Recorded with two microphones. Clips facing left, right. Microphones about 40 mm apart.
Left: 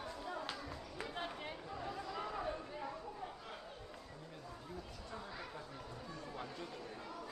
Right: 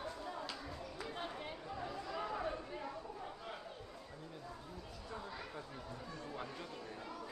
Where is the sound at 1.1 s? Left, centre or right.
Centre.